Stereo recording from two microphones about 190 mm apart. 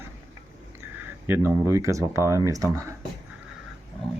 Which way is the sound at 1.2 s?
15° right (ahead or behind).